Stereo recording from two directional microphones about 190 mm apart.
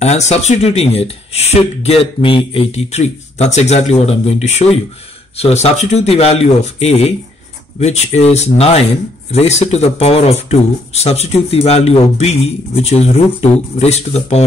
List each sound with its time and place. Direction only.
0.0 s speech: 35° left (ahead or behind)